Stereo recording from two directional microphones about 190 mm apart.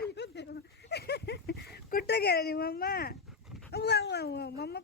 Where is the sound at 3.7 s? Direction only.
60° left (ahead or behind).